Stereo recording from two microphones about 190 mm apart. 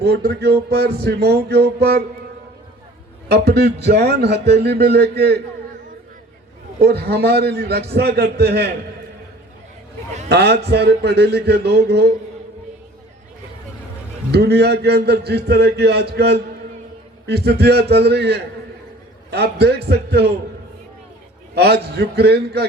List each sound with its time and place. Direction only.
0.0 s a man's voice: 55° right (ahead or behind)
3.2 s a man's voice: 60° right (ahead or behind)
6.8 s a man's voice: 60° right (ahead or behind)
10.2 s a man's voice: 60° right (ahead or behind)
14.3 s a man's voice: 60° right (ahead or behind)
21.5 s a man's voice: 60° right (ahead or behind)